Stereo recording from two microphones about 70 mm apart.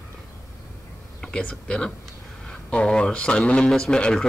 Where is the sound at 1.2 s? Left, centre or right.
Centre.